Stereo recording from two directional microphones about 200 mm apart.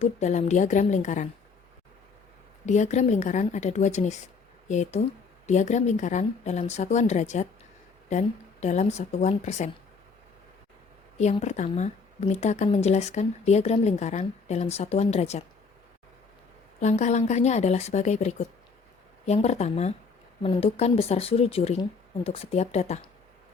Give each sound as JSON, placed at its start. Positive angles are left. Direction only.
{"t": 0.0, "sound": "speech", "side_deg": 35}
{"t": 2.6, "sound": "speech", "side_deg": 35}
{"t": 8.6, "sound": "speech", "side_deg": 35}
{"t": 11.2, "sound": "speech", "side_deg": 35}
{"t": 16.8, "sound": "speech", "side_deg": 35}